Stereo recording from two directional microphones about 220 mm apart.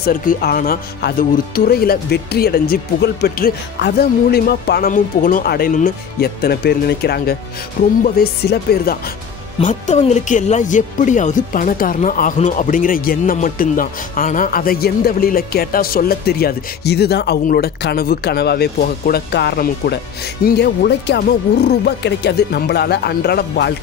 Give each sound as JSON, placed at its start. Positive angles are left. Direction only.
{"t": 0.0, "sound": "speech", "side_deg": 40}
{"t": 9.6, "sound": "speech", "side_deg": 35}